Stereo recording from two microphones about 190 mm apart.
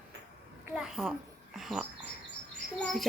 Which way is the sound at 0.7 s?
5° right (ahead or behind).